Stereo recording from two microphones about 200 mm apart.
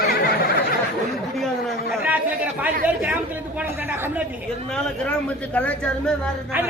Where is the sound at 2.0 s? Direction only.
10° right (ahead or behind).